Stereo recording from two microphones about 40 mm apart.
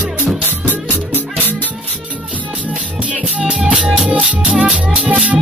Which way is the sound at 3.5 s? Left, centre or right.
Centre.